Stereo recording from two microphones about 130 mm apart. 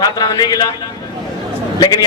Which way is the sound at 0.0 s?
30° left (ahead or behind).